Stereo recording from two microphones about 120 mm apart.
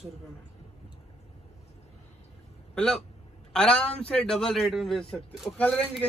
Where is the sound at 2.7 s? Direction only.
5° left (ahead or behind).